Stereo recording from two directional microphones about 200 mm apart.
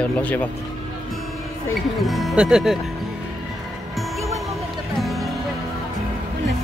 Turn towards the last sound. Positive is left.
turn(degrees=0)  # may be behind; listen again after turning